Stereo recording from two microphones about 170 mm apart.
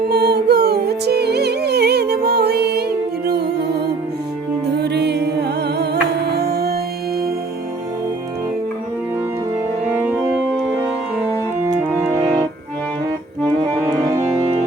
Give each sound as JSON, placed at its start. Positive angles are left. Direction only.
{"t": 0.1, "sound": "music", "side_deg": -70}
{"t": 4.8, "sound": "music", "side_deg": -80}
{"t": 10.8, "sound": "music", "side_deg": -15}